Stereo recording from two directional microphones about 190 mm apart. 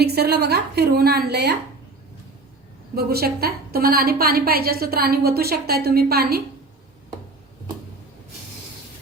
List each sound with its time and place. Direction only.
0.0 s a woman's voice: 60° right (ahead or behind)
2.9 s a woman's voice: 55° right (ahead or behind)